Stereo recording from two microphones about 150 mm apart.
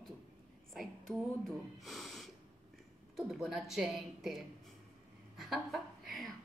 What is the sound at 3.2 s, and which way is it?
A woman's voice, centre (ahead or behind).